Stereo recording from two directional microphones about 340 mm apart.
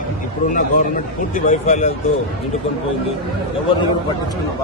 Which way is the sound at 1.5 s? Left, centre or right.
Centre.